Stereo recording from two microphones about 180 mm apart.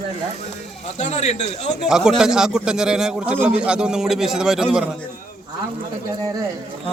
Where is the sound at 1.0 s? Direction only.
40° left (ahead or behind).